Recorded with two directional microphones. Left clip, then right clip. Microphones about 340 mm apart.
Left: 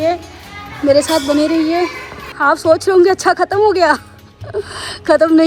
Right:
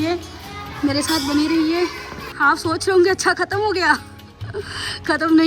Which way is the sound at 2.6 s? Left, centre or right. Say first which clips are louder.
Left 7 dB; centre.